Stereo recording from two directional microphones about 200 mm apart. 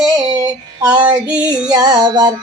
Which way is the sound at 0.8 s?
20° right (ahead or behind).